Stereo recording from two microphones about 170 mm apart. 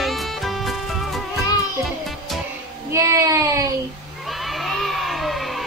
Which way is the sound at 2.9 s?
20° right (ahead or behind).